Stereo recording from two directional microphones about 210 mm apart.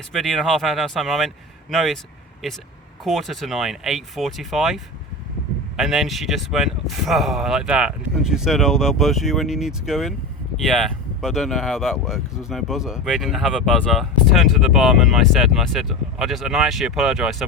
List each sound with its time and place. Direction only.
0.1 s speech: centre (ahead or behind)
3.0 s speech: centre (ahead or behind)